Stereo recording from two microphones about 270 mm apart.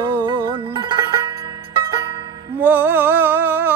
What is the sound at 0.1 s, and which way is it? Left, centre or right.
Music, centre.